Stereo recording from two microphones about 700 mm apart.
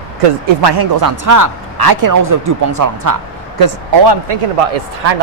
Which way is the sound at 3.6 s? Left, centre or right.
Right.